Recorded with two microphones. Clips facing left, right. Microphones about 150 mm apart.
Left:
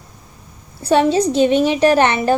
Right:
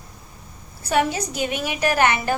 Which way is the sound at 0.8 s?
30° left (ahead or behind).